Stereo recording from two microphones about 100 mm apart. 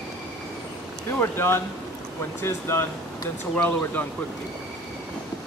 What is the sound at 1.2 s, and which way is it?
Speech, 25° left (ahead or behind).